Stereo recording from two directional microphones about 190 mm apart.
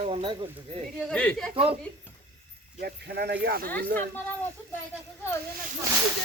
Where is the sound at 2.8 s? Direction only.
55° right (ahead or behind).